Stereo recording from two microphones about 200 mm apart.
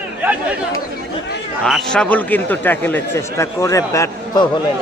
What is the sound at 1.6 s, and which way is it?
A man's voice, 5° left (ahead or behind).